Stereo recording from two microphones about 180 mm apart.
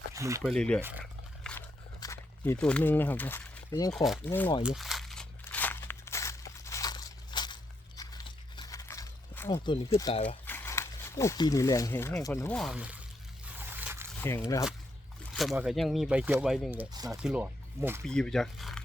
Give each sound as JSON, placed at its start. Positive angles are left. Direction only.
{"t": 0.1, "sound": "a sound", "side_deg": -15}
{"t": 0.4, "sound": "speech", "side_deg": 5}
{"t": 0.8, "sound": "speech", "side_deg": -10}
{"t": 1.5, "sound": "biting", "side_deg": 5}
{"t": 2.0, "sound": "speech", "side_deg": 15}
{"t": 3.9, "sound": "speech", "side_deg": 0}
{"t": 4.3, "sound": "speech", "side_deg": 10}
{"t": 4.6, "sound": "crumpling", "side_deg": 0}
{"t": 9.6, "sound": "speech", "side_deg": 30}
{"t": 10.2, "sound": "speech", "side_deg": 10}
{"t": 13.4, "sound": "a sound", "side_deg": -10}
{"t": 14.2, "sound": "speech", "side_deg": 10}
{"t": 15.3, "sound": "speech", "side_deg": 0}
{"t": 18.0, "sound": "speech", "side_deg": 5}